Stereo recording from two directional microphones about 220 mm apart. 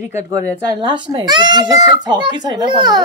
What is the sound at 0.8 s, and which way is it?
A child's voice, 20° right (ahead or behind).